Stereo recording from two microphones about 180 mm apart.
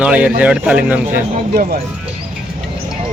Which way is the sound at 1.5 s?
55° right (ahead or behind).